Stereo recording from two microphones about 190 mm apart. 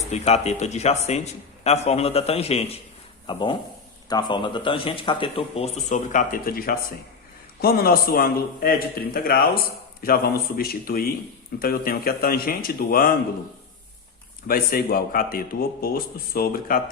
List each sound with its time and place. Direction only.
0.1 s a man's voice: 35° left (ahead or behind); by 9.5 s 50° left (ahead or behind)
10.6 s a man's voice: 50° left (ahead or behind)
14.4 s a man's voice: 50° left (ahead or behind)